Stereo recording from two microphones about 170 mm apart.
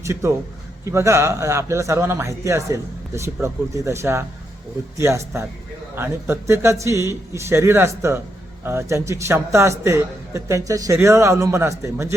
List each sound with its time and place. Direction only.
0.0 s speech: 15° right (ahead or behind)